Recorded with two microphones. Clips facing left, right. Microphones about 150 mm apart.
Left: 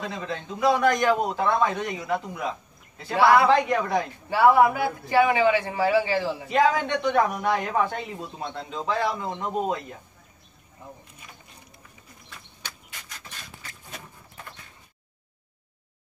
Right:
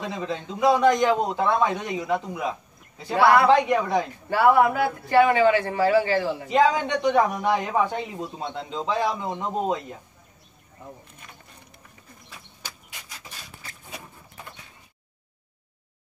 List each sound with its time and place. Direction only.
0.0 s speech: 15° right (ahead or behind)
4.5 s a man's voice: 15° left (ahead or behind)
6.4 s speech: 15° right (ahead or behind)
12.3 s a sound: 10° right (ahead or behind)